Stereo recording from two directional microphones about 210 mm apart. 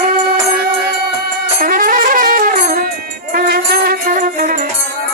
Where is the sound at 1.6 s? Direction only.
40° right (ahead or behind).